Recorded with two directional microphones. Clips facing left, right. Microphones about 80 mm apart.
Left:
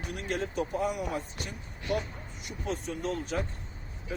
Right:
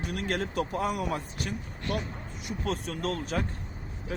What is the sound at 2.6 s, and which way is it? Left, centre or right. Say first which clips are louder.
Speech: right 1 dB; right.